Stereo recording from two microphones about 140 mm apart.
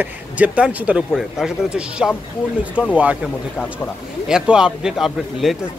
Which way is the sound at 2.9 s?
10° right (ahead or behind).